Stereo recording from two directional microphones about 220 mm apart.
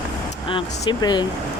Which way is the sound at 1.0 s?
20° left (ahead or behind).